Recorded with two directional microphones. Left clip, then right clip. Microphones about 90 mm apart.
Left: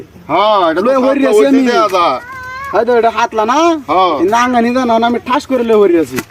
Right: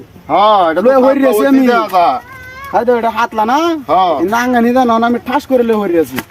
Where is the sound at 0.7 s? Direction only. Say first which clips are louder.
Right 2 dB; 65° left (ahead or behind).